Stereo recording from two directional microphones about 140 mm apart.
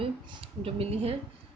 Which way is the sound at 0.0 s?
40° right (ahead or behind).